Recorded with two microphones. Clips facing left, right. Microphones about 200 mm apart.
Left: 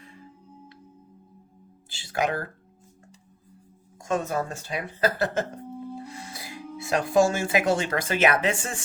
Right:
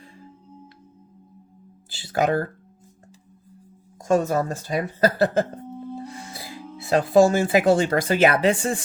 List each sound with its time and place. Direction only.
1.9 s a woman's voice: 35° right (ahead or behind)
4.1 s a woman's voice: 40° right (ahead or behind)